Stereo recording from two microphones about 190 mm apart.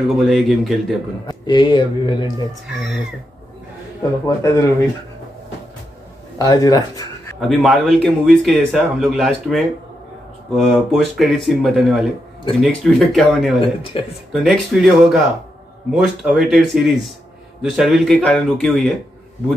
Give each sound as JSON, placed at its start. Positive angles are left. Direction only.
{"t": 0.3, "sound": "a man's voice", "side_deg": 0}
{"t": 1.2, "sound": "speech", "side_deg": 25}
{"t": 4.4, "sound": "speech", "side_deg": 15}
{"t": 6.3, "sound": "speech", "side_deg": 20}
{"t": 7.3, "sound": "a man's voice", "side_deg": 0}
{"t": 13.6, "sound": "speech", "side_deg": 30}
{"t": 14.4, "sound": "a man's voice", "side_deg": 0}